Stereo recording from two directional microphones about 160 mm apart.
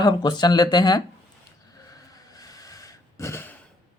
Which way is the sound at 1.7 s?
20° left (ahead or behind).